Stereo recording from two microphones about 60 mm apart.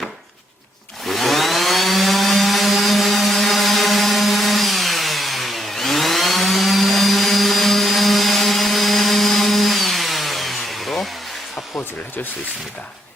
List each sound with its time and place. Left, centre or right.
1.0 s chainsaw: centre
11.5 s dental drill: left